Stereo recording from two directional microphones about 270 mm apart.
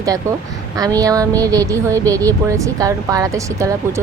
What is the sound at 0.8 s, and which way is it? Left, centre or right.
A woman's voice, centre.